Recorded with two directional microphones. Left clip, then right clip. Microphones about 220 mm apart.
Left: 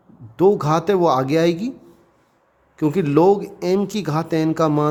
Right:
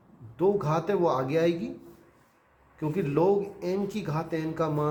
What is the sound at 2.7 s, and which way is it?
Speech, 50° left (ahead or behind).